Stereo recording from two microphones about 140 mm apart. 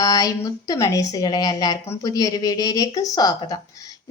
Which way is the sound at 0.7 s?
25° left (ahead or behind).